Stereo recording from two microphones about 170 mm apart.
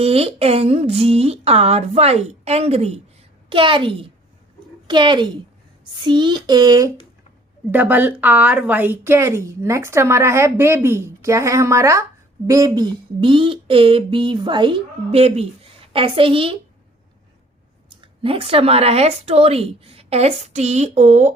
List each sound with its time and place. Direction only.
0.0 s speech: 35° right (ahead or behind)
7.7 s a woman's voice: 10° right (ahead or behind); by 16.6 s 30° right (ahead or behind)
17.8 s speech: 30° right (ahead or behind)